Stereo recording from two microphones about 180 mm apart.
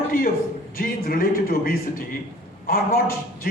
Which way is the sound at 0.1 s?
50° left (ahead or behind).